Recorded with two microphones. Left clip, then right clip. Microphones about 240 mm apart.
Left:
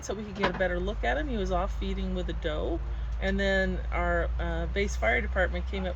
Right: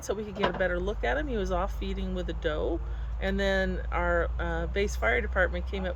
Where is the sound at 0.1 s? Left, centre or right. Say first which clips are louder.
Right 1 dB; centre.